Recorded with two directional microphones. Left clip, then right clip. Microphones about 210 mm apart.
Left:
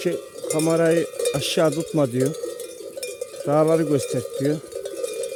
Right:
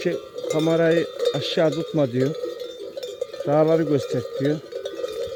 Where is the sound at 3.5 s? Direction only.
5° left (ahead or behind).